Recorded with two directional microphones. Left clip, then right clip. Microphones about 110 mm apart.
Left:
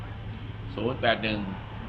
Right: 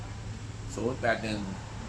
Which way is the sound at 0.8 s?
10° right (ahead or behind).